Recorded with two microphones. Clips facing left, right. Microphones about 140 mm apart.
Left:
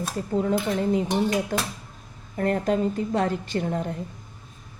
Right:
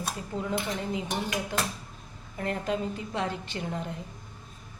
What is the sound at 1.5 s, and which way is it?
A woman's voice, 40° left (ahead or behind).